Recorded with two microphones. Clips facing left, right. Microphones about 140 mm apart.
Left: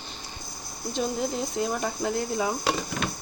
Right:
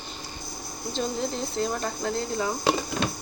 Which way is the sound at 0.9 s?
10° left (ahead or behind).